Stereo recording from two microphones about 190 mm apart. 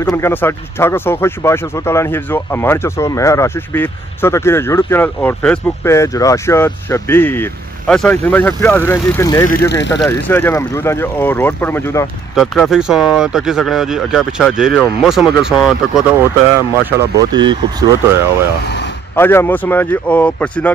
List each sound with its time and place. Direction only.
0.0 s speech: 15° left (ahead or behind)
9.5 s speech: 60° left (ahead or behind)
10.0 s speech: 10° left (ahead or behind)
12.4 s speech: centre (ahead or behind)
17.3 s speech: 25° right (ahead or behind)
19.1 s speech: 10° left (ahead or behind)